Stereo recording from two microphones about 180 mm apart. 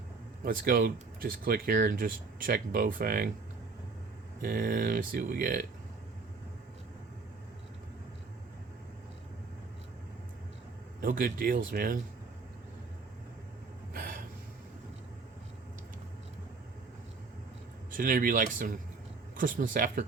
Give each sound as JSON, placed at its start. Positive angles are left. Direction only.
{"t": 0.4, "sound": "speech", "side_deg": -50}
{"t": 4.4, "sound": "speech", "side_deg": -50}
{"t": 11.0, "sound": "speech", "side_deg": -50}
{"t": 13.9, "sound": "gasp", "side_deg": -55}
{"t": 17.9, "sound": "speech", "side_deg": -50}